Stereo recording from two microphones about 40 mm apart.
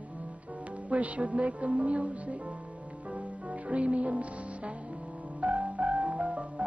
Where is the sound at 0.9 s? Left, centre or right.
Right.